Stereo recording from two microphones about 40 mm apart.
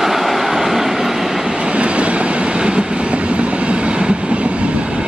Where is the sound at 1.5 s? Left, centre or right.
Right.